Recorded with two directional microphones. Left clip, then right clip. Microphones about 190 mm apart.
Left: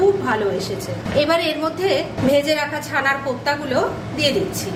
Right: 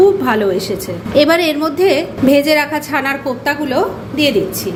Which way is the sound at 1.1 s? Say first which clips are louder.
Right 6 dB; 40° right (ahead or behind).